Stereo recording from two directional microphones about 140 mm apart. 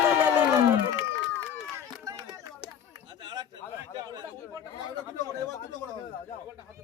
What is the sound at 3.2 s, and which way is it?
Chatter, 30° right (ahead or behind).